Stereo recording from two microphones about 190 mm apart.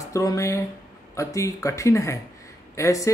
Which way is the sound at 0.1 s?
20° left (ahead or behind).